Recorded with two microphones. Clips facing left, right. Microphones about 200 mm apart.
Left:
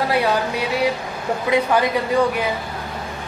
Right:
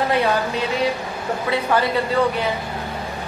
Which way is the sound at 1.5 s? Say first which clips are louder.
Left 3 dB; 15° left (ahead or behind).